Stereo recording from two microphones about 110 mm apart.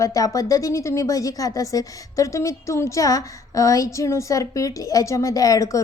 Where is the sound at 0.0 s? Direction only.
30° left (ahead or behind).